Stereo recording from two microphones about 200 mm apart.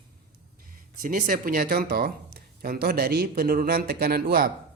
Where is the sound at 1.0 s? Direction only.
45° right (ahead or behind).